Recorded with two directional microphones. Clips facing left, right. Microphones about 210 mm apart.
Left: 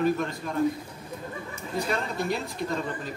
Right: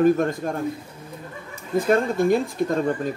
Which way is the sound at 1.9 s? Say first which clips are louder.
Right 12 dB; 50° right (ahead or behind).